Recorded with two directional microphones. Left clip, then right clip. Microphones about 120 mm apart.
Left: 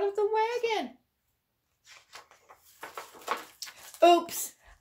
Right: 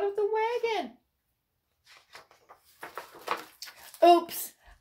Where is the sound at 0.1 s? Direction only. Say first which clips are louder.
Even; 40° left (ahead or behind).